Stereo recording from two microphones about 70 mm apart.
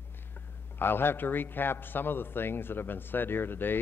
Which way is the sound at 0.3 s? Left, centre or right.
Left.